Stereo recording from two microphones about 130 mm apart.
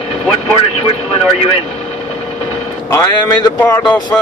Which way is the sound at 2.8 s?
25° left (ahead or behind).